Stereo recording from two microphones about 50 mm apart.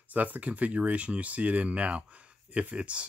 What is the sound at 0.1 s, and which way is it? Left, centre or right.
Speech, right.